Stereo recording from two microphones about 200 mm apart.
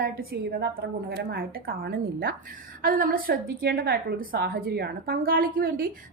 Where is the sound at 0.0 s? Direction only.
50° right (ahead or behind).